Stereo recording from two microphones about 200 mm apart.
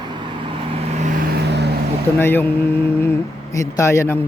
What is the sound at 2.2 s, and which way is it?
Speech, 10° left (ahead or behind).